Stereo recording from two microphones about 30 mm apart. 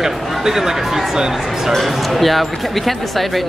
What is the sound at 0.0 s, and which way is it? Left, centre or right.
Speech, centre.